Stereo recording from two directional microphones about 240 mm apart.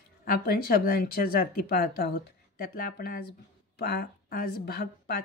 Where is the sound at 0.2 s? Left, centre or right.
Left.